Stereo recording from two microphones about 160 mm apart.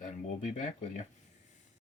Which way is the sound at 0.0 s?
50° left (ahead or behind).